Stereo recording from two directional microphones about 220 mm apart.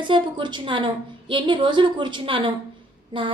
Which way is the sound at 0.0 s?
20° right (ahead or behind).